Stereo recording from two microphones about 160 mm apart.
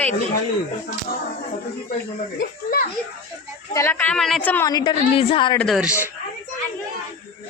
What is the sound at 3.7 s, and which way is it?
Speech, 15° left (ahead or behind).